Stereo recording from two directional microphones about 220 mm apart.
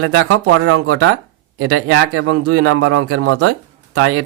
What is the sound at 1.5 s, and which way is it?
A man's voice, 80° right.